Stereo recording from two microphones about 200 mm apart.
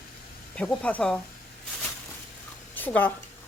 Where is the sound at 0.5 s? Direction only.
5° left (ahead or behind).